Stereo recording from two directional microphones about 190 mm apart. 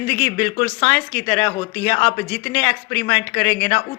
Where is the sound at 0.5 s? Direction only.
30° left (ahead or behind).